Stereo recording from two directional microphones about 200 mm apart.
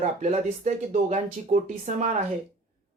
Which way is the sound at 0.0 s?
35° right (ahead or behind).